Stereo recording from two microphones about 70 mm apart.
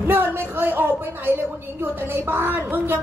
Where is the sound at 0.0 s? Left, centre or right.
Right.